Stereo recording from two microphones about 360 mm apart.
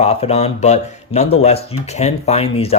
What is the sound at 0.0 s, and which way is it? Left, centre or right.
Speech, centre.